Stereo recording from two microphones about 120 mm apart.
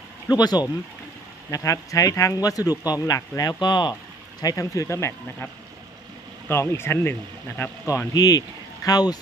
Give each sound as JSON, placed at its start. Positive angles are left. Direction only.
{"t": 0.3, "sound": "speech", "side_deg": 35}
{"t": 6.5, "sound": "speech", "side_deg": 20}